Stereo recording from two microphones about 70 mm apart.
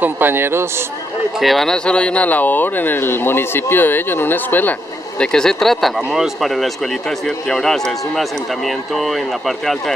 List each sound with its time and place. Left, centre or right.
0.0 s a man's voice: right
1.4 s a man's voice: centre
1.9 s speech: centre
5.2 s a man's voice: centre